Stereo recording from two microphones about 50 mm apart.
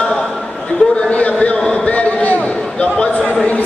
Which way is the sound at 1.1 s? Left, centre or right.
Left.